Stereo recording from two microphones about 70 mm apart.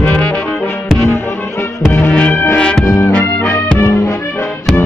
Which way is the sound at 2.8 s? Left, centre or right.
Left.